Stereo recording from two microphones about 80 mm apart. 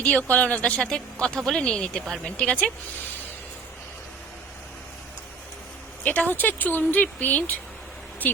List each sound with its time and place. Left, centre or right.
0.0 s speech: centre
6.1 s speech: left